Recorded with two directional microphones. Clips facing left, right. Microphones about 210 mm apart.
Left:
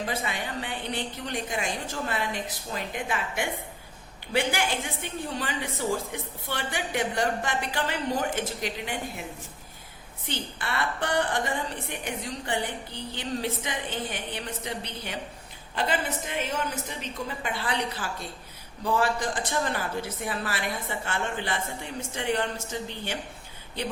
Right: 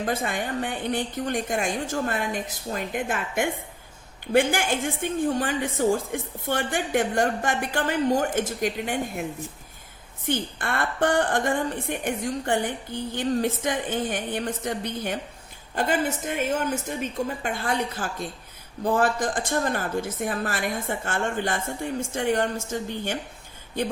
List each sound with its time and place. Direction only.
0.0 s a woman's voice: 50° right (ahead or behind)
10.2 s a woman's voice: 50° right (ahead or behind)